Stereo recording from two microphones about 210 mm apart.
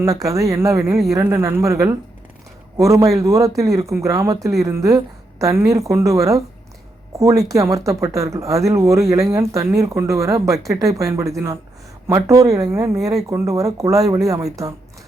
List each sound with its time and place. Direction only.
0.0 s speech: 15° right (ahead or behind)
7.4 s speech: 15° right (ahead or behind)